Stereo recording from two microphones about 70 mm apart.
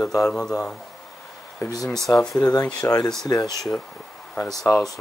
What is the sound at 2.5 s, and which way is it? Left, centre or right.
Speech, left.